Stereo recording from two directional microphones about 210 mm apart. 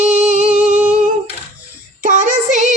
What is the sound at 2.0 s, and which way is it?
Child singing, 35° right (ahead or behind).